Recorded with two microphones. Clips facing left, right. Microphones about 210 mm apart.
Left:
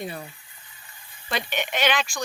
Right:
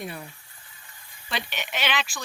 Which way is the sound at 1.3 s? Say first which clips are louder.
Left 5 dB; 45° left (ahead or behind).